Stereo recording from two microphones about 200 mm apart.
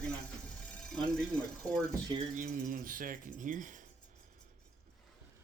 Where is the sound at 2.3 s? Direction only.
45° right (ahead or behind).